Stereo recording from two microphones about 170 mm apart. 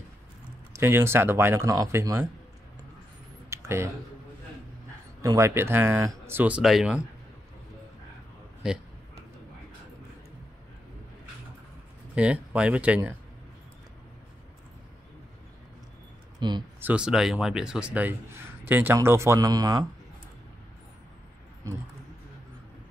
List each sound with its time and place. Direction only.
0.7 s a man's voice: 15° right (ahead or behind)
3.4 s a sound: 15° right (ahead or behind)
5.2 s a man's voice: 20° right (ahead or behind); by 7.0 s centre (ahead or behind)
8.6 s speech: 5° right (ahead or behind)
12.2 s a man's voice: 5° right (ahead or behind)
16.3 s speech: 25° right (ahead or behind)
16.8 s a man's voice: 5° right (ahead or behind); by 19.9 s 20° right (ahead or behind)